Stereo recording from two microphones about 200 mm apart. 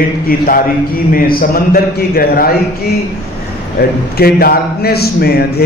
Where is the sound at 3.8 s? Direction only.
50° left (ahead or behind).